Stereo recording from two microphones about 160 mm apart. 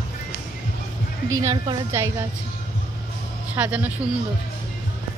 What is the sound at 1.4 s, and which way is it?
Speech, 20° right (ahead or behind).